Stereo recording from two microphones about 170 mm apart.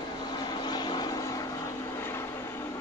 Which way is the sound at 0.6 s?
25° left (ahead or behind).